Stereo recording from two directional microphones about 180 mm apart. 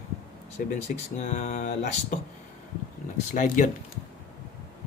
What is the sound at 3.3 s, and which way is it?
Speech, 45° left (ahead or behind).